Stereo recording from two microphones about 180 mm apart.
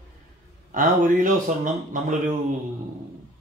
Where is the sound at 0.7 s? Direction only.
45° right (ahead or behind).